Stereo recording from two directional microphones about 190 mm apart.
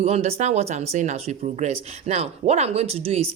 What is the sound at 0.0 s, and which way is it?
Speech, 35° right (ahead or behind).